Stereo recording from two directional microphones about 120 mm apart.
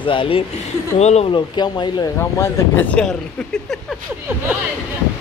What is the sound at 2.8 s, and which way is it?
Speech, 10° left (ahead or behind).